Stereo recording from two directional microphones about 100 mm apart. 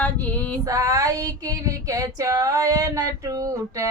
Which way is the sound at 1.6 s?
35° right (ahead or behind).